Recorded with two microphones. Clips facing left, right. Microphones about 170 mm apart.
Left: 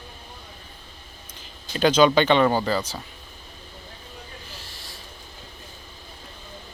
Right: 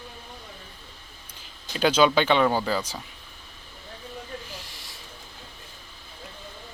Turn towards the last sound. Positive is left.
turn(degrees=-20)  # may be behind; listen again after turning